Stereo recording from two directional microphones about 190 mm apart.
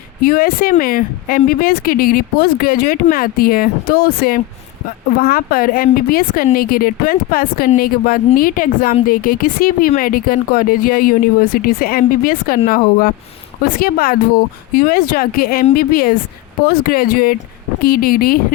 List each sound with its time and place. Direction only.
0.2 s speech: 50° left (ahead or behind)